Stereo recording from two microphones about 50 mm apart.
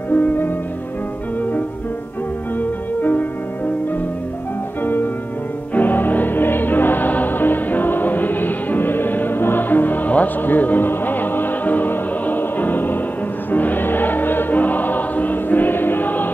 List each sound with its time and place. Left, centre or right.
0.1 s music: left
3.0 s music: left
4.8 s music: left
13.5 s choir: left